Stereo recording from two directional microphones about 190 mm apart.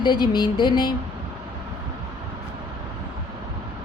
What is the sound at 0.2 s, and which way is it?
Speech, 25° left (ahead or behind).